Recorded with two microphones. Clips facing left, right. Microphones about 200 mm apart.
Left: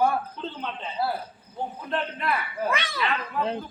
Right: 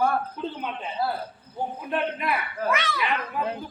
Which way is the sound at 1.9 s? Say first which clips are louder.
Right 1 dB; 10° right (ahead or behind).